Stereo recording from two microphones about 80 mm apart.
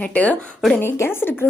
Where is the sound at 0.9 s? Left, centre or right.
Left.